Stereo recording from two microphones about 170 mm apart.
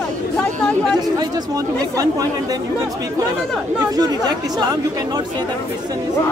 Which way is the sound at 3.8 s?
20° right (ahead or behind).